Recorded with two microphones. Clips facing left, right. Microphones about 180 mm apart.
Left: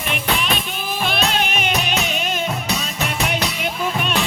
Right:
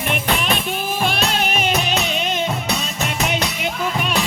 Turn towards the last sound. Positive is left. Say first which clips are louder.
# right 1 dB
turn(degrees=-20)  # may be behind; listen again after turning